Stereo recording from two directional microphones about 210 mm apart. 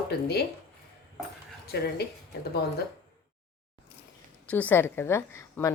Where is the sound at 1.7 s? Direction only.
50° left (ahead or behind).